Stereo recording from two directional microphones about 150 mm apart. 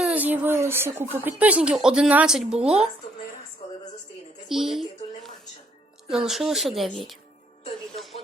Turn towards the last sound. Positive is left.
turn(degrees=0)  # may be behind; listen again after turning